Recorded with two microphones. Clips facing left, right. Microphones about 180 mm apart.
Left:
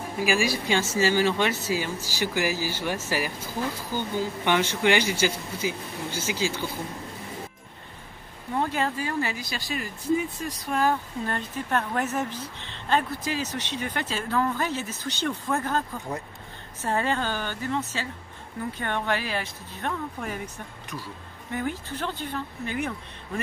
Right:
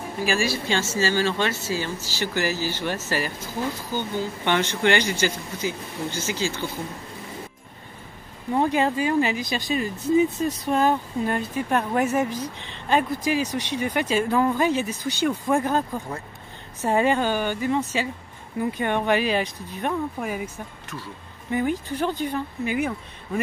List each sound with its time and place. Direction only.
0.2 s speech: 15° left (ahead or behind)
8.5 s speech: 15° right (ahead or behind)
16.8 s speech: 15° right (ahead or behind)
21.5 s speech: 15° right (ahead or behind)